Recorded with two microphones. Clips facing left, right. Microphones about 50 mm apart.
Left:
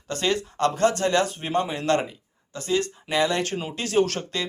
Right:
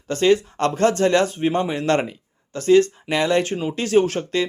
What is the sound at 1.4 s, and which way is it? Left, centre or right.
Speech, right.